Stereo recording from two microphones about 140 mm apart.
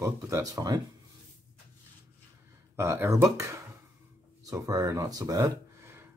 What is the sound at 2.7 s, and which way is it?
Speech, 15° right (ahead or behind).